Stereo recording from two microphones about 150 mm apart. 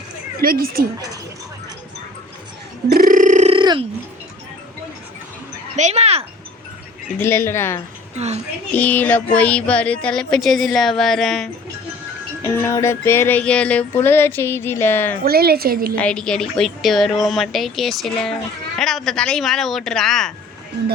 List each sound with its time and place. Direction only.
0.4 s a woman's voice: 80° right
2.9 s a sound: 65° right (ahead or behind)
3.5 s a sound: 35° right (ahead or behind)
5.7 s a sound: 50° right (ahead or behind)
7.2 s speech: 15° left (ahead or behind)
8.1 s a woman's voice: 45° right (ahead or behind)
8.7 s speech: 10° left (ahead or behind)
12.5 s speech: 15° left (ahead or behind)
15.2 s a woman's voice: 90° right
16.0 s a woman's voice: 5° left (ahead or behind)